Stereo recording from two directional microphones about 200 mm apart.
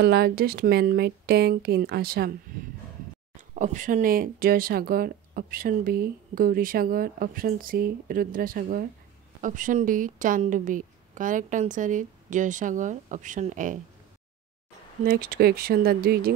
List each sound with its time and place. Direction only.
0.0 s speech: 50° right (ahead or behind)
3.3 s a woman's voice: 40° right (ahead or behind)
15.0 s speech: 45° right (ahead or behind)